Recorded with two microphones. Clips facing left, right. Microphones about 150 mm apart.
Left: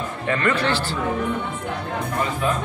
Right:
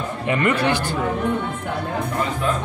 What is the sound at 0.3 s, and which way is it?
Speech, 20° right (ahead or behind).